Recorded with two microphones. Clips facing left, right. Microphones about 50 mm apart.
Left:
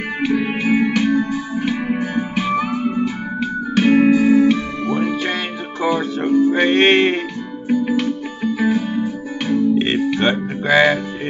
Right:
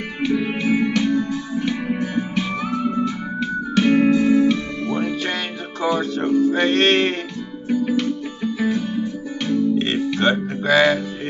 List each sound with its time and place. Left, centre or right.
0.4 s music: left